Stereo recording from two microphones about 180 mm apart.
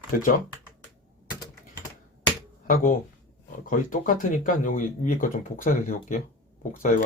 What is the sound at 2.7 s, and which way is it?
Speech, 45° left (ahead or behind).